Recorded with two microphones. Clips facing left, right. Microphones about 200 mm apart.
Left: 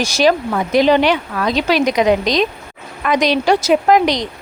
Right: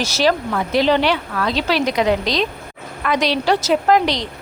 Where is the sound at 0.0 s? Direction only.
15° left (ahead or behind).